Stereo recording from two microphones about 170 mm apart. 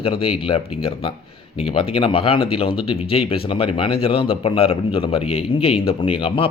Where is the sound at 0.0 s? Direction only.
35° left (ahead or behind).